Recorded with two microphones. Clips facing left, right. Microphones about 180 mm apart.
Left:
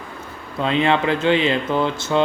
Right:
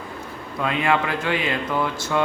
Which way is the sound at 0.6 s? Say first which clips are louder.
Left 4 dB; 25° left (ahead or behind).